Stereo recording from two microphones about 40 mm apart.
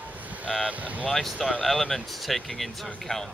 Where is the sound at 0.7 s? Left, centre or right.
Right.